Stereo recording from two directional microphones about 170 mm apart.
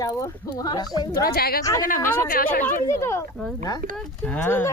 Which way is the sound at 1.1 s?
65° left (ahead or behind).